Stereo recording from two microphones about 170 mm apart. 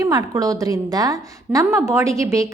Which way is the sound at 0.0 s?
20° right (ahead or behind).